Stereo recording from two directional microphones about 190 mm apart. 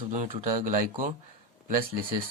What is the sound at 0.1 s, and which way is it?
Speech, 40° right (ahead or behind).